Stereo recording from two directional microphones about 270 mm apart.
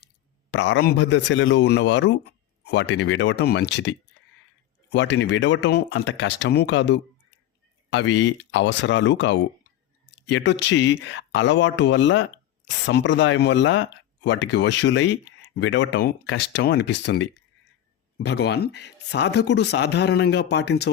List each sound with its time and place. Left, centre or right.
0.5 s speech: left